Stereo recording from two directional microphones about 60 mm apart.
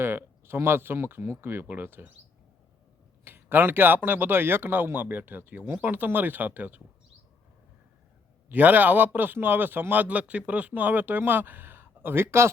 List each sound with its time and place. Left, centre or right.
0.0 s speech: right
3.2 s speech: right
8.4 s speech: right